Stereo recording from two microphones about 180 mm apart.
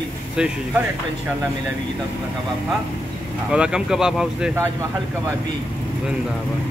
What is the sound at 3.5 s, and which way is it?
Speech, 5° right (ahead or behind).